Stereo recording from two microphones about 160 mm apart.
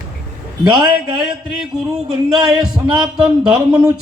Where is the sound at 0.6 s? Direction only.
30° right (ahead or behind).